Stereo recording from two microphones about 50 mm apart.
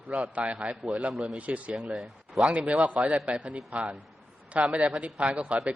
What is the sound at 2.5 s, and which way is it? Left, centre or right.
Speech, right.